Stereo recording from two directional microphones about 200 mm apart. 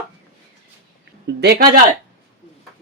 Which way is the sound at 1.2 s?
55° right (ahead or behind).